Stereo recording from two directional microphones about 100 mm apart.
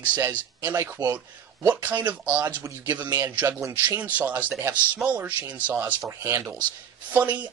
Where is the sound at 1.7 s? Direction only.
15° right (ahead or behind).